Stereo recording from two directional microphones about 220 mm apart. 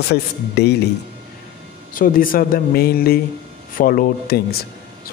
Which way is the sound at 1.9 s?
40° left (ahead or behind).